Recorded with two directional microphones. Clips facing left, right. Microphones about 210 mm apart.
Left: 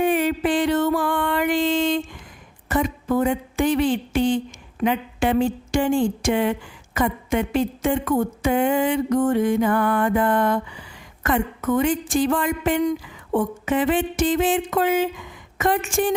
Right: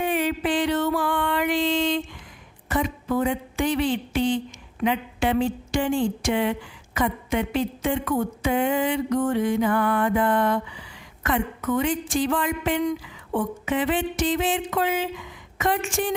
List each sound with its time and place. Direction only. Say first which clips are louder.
0.0 s music: left 4 dB; 50° left (ahead or behind)
2.6 s a woman's voice: left 3 dB; 45° left (ahead or behind)